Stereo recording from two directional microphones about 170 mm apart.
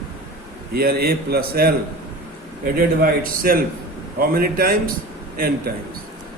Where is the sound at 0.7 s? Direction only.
65° right (ahead or behind).